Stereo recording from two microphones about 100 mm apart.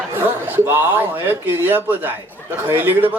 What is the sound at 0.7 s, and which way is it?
Speech, 20° right (ahead or behind).